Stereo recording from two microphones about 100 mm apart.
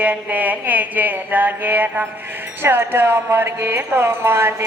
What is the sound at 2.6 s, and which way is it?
Speech, 20° right (ahead or behind).